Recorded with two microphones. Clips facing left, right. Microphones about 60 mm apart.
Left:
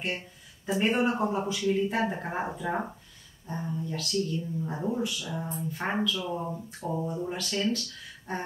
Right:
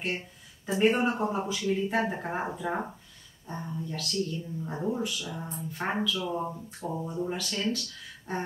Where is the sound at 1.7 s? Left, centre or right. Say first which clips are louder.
Left 1 dB; centre.